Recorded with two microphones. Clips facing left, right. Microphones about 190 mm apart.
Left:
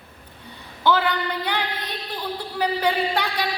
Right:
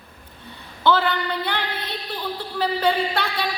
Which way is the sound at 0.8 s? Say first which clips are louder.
Right 1 dB; 15° left (ahead or behind).